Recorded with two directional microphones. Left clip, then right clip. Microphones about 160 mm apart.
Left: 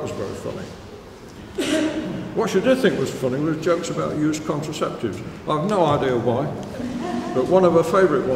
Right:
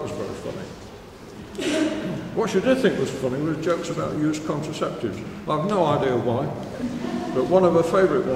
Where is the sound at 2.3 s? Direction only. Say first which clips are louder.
Left 2 dB; 15° left (ahead or behind).